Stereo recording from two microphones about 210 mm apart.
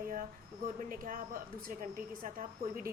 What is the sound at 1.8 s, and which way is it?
Speech, 40° right (ahead or behind).